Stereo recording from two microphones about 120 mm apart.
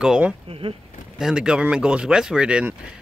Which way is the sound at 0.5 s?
50° right (ahead or behind).